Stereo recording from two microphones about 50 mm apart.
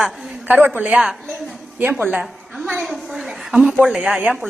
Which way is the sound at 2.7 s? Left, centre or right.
Centre.